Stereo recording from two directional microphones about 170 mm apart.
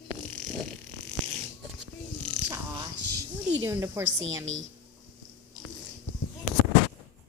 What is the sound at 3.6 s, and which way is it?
Speech, 15° right (ahead or behind).